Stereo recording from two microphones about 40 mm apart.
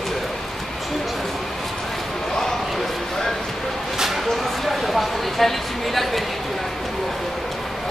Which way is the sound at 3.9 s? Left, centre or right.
Centre.